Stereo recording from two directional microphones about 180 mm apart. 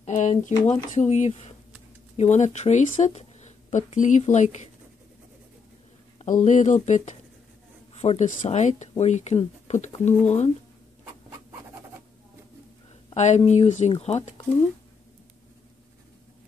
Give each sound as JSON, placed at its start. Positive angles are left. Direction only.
{"t": 0.0, "sound": "speech", "side_deg": 40}
{"t": 6.1, "sound": "speech", "side_deg": 45}
{"t": 13.1, "sound": "speech", "side_deg": 40}